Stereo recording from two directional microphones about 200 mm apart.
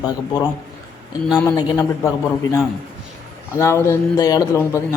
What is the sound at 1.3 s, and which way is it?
Speech, 20° left (ahead or behind).